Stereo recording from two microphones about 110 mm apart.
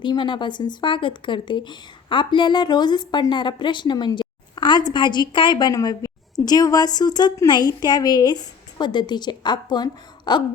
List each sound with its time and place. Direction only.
0.0 s a woman's voice: 45° left (ahead or behind)